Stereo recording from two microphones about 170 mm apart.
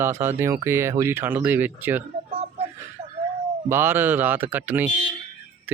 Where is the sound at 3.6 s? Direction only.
15° right (ahead or behind).